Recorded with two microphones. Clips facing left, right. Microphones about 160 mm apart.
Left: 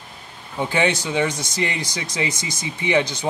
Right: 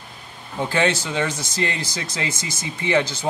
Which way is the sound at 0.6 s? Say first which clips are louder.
Even; 15° left (ahead or behind).